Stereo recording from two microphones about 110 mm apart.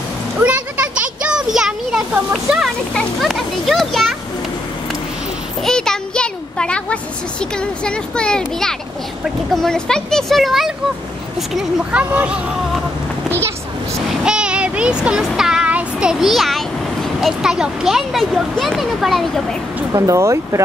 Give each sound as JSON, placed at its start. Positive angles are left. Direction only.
{"t": 0.4, "sound": "a sound", "side_deg": -10}
{"t": 2.9, "sound": "speech", "side_deg": 0}
{"t": 5.7, "sound": "children playing", "side_deg": 5}
{"t": 7.8, "sound": "speech", "side_deg": 10}
{"t": 11.5, "sound": "speech", "side_deg": -10}
{"t": 14.2, "sound": "child singing", "side_deg": -10}
{"t": 17.2, "sound": "speech", "side_deg": -5}
{"t": 19.9, "sound": "speech", "side_deg": -30}